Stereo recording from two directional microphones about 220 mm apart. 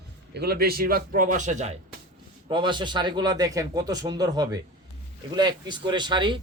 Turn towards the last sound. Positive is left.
turn(degrees=-20)  # may be behind; listen again after turning